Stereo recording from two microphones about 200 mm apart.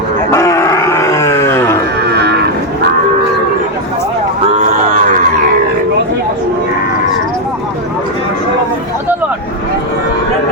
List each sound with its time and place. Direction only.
0.3 s a sound: 15° left (ahead or behind)
2.0 s livestock: 55° right (ahead or behind)
4.6 s cattle: 35° right (ahead or behind)